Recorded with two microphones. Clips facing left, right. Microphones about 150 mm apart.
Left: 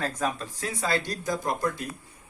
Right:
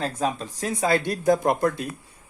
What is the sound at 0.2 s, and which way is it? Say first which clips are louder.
Speech: right 5 dB; 30° right (ahead or behind).